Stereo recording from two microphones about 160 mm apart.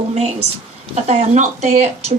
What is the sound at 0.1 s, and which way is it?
A woman's voice, 40° right (ahead or behind).